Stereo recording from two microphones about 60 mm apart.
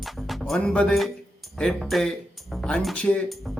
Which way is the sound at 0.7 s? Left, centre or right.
Centre.